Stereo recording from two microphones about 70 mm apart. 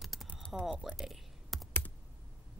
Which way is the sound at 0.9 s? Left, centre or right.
Centre.